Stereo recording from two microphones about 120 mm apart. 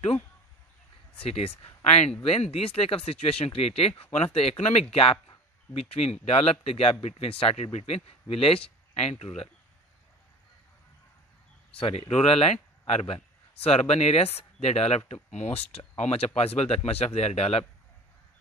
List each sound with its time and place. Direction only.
1.2 s speech: 55° left (ahead or behind)
11.7 s speech: 50° left (ahead or behind)